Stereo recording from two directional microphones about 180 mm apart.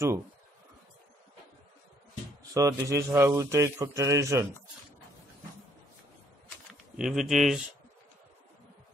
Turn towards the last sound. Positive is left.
turn(degrees=0)  # may be behind; listen again after turning